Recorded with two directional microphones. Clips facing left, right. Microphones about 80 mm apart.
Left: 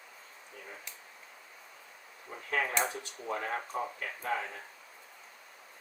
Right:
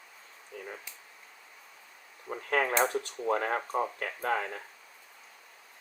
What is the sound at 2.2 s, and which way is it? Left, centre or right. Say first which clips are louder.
Speech: right 5 dB; right.